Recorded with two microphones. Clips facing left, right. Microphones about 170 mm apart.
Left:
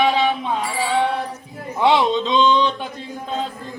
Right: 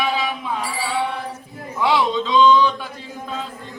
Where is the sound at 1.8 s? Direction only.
25° left (ahead or behind).